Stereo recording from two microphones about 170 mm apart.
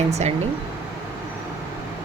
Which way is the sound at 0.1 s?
40° right (ahead or behind).